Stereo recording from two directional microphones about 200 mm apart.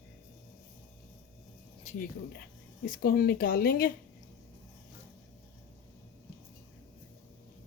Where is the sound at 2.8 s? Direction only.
45° left (ahead or behind).